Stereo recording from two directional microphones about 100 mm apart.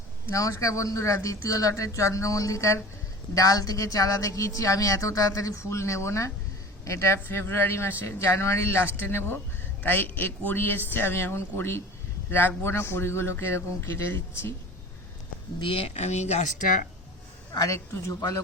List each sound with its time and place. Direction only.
0.3 s a man's voice: 30° left (ahead or behind)
15.6 s speech: 65° left (ahead or behind); by 16.4 s 90° left
17.5 s speech: 35° left (ahead or behind)